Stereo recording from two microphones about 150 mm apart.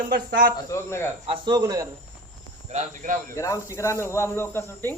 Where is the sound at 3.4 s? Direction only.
20° left (ahead or behind).